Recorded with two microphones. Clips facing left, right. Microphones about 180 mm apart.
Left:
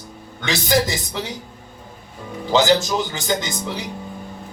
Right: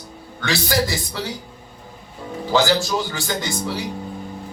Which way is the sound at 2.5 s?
20° left (ahead or behind).